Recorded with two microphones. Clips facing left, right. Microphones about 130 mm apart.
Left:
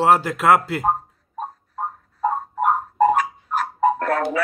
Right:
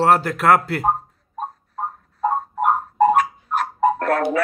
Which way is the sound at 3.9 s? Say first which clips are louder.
Right 2 dB; 45° right (ahead or behind).